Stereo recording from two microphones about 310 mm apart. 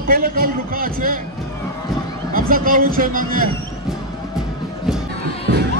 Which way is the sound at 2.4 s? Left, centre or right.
Right.